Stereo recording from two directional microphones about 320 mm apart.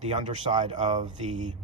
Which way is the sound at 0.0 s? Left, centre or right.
Right.